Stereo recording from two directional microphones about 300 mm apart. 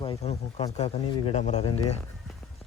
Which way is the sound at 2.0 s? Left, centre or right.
Centre.